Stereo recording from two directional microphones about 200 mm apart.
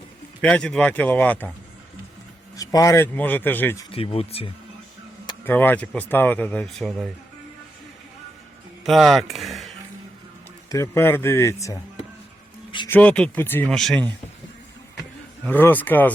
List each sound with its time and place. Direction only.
0.4 s speech: 5° left (ahead or behind)
2.6 s speech: 15° left (ahead or behind)
3.9 s speech: 30° left (ahead or behind)
5.5 s speech: 10° left (ahead or behind)
8.8 s speech: centre (ahead or behind)
10.7 s speech: 15° left (ahead or behind)
12.9 s speech: 5° left (ahead or behind)
15.4 s speech: 10° left (ahead or behind)